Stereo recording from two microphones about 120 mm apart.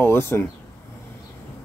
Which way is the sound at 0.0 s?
20° left (ahead or behind).